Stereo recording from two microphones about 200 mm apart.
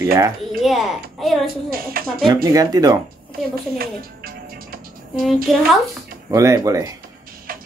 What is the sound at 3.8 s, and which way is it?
Music, 50° right (ahead or behind).